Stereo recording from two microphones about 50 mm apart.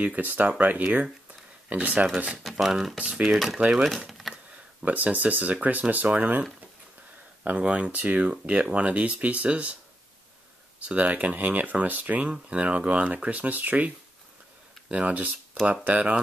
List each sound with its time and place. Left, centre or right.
0.0 s speech: right
2.6 s speech: centre
3.1 s speech: right
3.3 s speech: centre
4.2 s a sound: centre
4.8 s speech: right
7.5 s speech: right
10.9 s speech: right